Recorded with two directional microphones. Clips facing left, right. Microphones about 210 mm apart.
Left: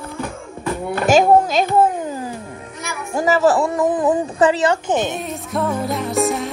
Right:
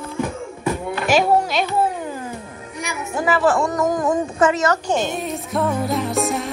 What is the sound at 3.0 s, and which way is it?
A woman's voice, 40° left (ahead or behind).